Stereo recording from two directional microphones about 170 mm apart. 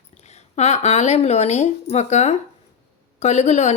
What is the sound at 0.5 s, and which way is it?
Speech, 40° left (ahead or behind).